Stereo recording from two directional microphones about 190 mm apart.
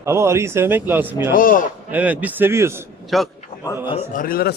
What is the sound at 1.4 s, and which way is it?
Speech, 45° left (ahead or behind).